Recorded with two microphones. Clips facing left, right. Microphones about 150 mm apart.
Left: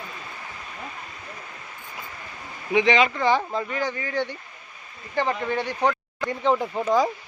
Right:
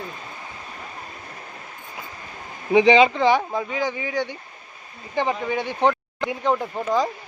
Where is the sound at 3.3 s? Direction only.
10° right (ahead or behind).